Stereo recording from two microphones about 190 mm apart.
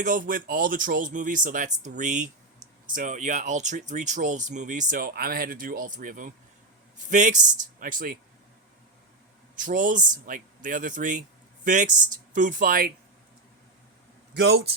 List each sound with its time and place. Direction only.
0.0 s speech: 45° right (ahead or behind)
9.6 s speech: 45° right (ahead or behind)
14.3 s a man's voice: 60° right (ahead or behind)